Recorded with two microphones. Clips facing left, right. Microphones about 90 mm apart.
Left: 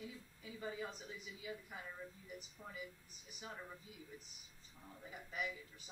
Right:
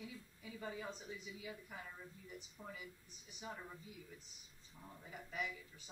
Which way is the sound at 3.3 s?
5° left (ahead or behind).